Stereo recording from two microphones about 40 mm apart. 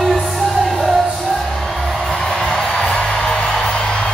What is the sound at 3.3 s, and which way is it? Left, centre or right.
Music, left.